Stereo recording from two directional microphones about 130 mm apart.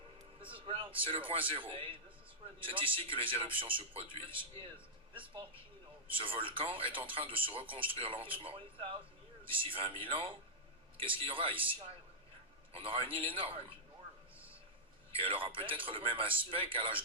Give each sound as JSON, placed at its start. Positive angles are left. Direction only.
{"t": 0.4, "sound": "a man's voice", "side_deg": -45}
{"t": 6.1, "sound": "speech", "side_deg": -45}
{"t": 15.1, "sound": "speech", "side_deg": -45}